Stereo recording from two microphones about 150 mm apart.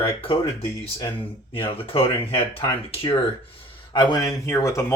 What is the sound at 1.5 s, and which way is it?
Speech, 35° left (ahead or behind).